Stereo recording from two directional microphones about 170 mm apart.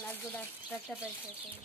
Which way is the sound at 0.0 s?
10° left (ahead or behind).